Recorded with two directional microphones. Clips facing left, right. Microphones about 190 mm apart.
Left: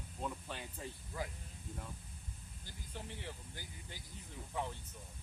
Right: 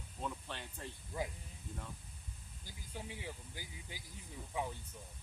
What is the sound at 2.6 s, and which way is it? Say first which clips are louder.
Speech: right 1 dB; 10° right (ahead or behind).